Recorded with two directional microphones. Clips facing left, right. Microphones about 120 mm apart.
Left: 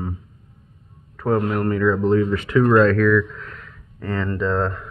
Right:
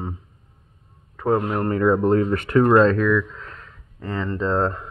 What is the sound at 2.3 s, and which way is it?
Speech, 50° right (ahead or behind).